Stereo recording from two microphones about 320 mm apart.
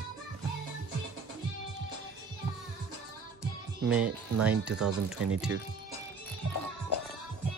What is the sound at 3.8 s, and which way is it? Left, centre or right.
Speech, centre.